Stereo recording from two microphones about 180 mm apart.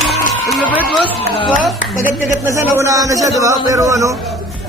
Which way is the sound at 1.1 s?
30° left (ahead or behind).